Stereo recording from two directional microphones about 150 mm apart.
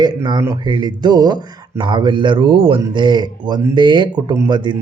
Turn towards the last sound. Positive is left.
turn(degrees=-30)  # may be behind; listen again after turning